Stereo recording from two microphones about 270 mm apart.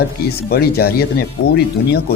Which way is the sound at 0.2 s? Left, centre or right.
Left.